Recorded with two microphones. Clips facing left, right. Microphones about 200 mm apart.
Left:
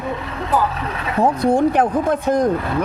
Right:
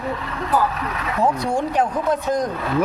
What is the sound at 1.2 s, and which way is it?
Speech, 55° left (ahead or behind).